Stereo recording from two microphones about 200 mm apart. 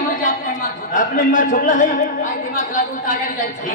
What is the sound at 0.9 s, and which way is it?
A man's voice, 40° left (ahead or behind).